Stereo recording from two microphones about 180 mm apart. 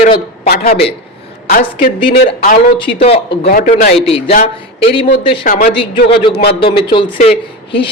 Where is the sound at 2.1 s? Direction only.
60° left (ahead or behind).